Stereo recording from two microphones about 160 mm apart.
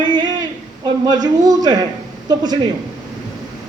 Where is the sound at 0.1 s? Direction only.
25° right (ahead or behind).